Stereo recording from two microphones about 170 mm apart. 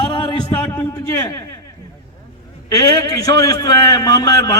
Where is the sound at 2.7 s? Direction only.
20° left (ahead or behind).